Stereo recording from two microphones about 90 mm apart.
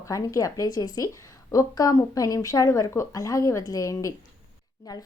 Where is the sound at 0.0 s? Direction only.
40° left (ahead or behind).